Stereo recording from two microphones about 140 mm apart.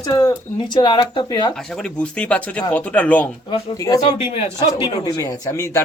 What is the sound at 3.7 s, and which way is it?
Speech, 25° left (ahead or behind).